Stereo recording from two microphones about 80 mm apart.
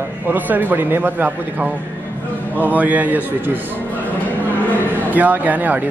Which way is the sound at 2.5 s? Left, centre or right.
Right.